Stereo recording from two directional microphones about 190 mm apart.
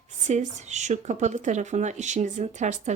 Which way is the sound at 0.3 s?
40° right (ahead or behind).